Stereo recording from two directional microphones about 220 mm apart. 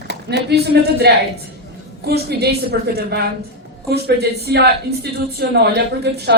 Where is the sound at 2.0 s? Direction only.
45° right (ahead or behind).